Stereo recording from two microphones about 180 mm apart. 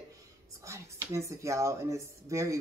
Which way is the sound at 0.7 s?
15° right (ahead or behind).